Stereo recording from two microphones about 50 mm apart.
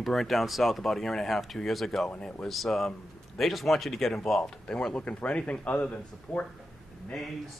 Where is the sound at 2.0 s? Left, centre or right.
Centre.